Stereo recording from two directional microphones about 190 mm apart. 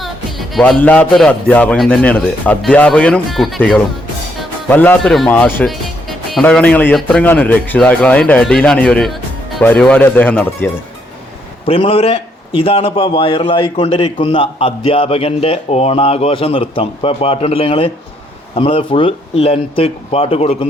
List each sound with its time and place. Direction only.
0.0 s speech: centre (ahead or behind)
11.6 s a man's voice: 30° left (ahead or behind)